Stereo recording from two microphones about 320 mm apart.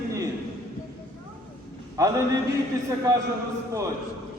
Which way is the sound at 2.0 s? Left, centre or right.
Centre.